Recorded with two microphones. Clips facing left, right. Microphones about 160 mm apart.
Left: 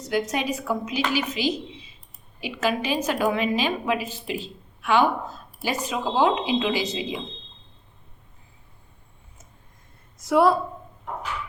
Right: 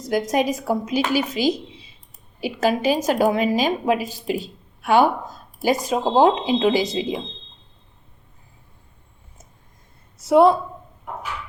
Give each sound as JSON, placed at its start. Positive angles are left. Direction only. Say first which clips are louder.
{"t": 0.1, "sound": "a woman's voice", "louder": "right 5 dB", "side_deg": -40}
{"t": 10.2, "sound": "a woman's voice", "louder": "right 5 dB", "side_deg": -25}